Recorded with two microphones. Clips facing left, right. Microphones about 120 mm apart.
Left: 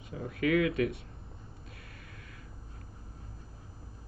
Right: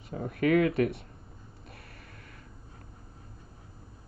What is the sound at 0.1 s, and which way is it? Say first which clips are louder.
Speech: right 3 dB; 45° right (ahead or behind).